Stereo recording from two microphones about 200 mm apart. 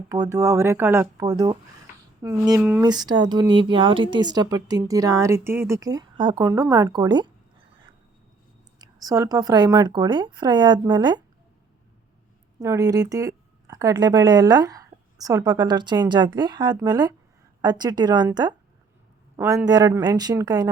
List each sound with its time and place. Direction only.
0.1 s speech: 15° right (ahead or behind)
2.8 s speech: 20° right (ahead or behind)
8.8 s speech: 15° right (ahead or behind)
12.5 s speech: 15° right (ahead or behind)
19.6 s speech: 20° right (ahead or behind)